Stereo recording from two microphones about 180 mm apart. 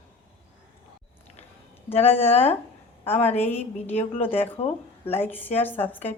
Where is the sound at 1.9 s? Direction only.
35° left (ahead or behind).